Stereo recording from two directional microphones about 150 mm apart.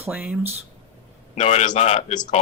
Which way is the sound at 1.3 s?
50° left (ahead or behind).